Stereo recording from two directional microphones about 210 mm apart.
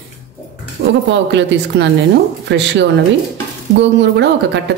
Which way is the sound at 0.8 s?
50° right (ahead or behind).